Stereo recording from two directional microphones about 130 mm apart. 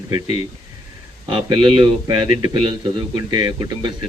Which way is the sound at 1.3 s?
40° right (ahead or behind).